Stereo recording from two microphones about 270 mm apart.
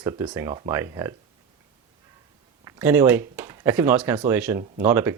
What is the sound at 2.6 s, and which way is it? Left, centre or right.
Speech, centre.